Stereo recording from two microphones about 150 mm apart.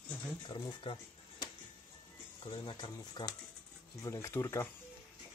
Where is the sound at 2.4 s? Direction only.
35° left (ahead or behind).